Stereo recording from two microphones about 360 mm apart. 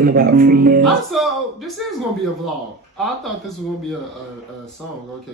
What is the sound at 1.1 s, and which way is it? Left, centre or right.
Speech, centre.